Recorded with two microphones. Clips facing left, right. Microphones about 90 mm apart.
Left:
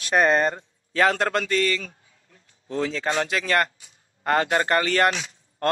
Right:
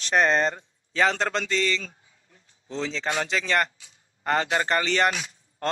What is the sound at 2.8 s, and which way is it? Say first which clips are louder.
A man's voice: left 3 dB; 5° left (ahead or behind).